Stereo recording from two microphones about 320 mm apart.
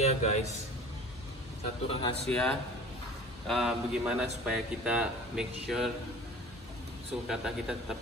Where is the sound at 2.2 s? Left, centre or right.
Centre.